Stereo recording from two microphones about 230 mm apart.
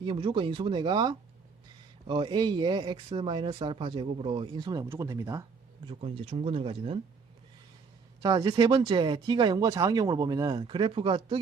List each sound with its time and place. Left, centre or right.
0.0 s speech: right
8.2 s speech: centre